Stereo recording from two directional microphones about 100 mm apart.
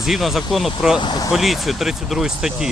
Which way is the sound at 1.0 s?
45° left (ahead or behind).